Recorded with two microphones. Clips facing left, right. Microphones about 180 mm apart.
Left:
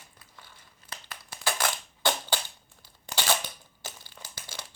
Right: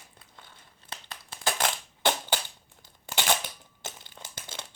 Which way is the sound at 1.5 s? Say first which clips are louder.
Right 1 dB; 20° right (ahead or behind).